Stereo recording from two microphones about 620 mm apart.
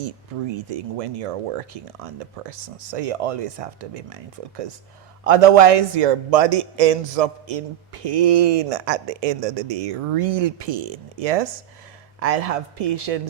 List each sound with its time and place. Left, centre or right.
0.5 s speech: right